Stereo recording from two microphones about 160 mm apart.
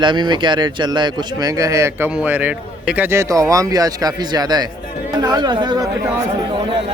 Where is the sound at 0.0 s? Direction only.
30° right (ahead or behind).